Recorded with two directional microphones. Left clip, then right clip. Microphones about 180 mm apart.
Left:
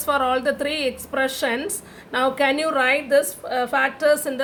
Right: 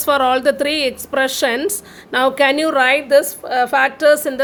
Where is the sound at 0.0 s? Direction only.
50° right (ahead or behind).